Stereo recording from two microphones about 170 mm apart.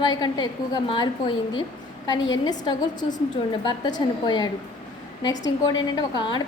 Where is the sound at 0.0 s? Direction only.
25° left (ahead or behind).